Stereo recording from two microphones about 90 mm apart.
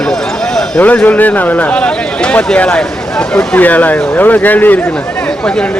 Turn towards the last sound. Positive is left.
turn(degrees=10)  # may be behind; listen again after turning